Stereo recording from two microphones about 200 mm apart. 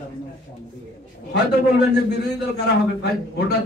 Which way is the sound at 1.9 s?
55° left (ahead or behind).